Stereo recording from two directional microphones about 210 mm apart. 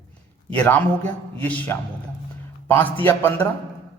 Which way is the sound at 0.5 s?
5° left (ahead or behind).